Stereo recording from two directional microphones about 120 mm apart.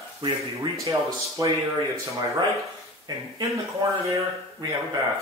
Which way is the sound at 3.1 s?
35° right (ahead or behind).